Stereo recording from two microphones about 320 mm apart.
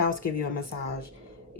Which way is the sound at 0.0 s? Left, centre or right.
Left.